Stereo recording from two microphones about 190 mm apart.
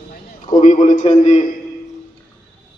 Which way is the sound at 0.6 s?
40° left (ahead or behind).